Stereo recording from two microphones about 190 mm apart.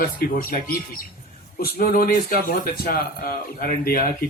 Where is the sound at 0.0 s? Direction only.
45° left (ahead or behind).